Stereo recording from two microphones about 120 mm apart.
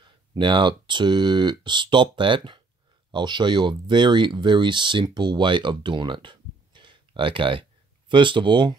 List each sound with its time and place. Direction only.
0.0 s speech: 40° right (ahead or behind)